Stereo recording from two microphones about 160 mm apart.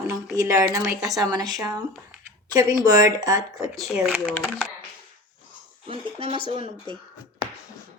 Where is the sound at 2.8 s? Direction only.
25° right (ahead or behind).